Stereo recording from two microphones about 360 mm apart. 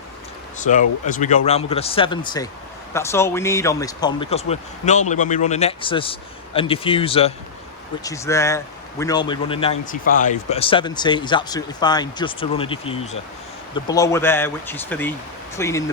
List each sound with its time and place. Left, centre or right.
0.6 s speech: left